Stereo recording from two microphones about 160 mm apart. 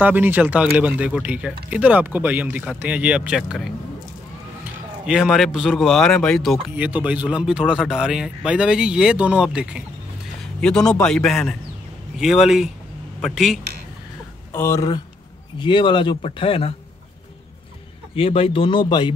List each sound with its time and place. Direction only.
0.0 s speech: 10° right (ahead or behind)
5.0 s speech: 5° right (ahead or behind)
14.5 s speech: 15° left (ahead or behind)
15.6 s speech: 30° left (ahead or behind)
18.1 s speech: 35° left (ahead or behind)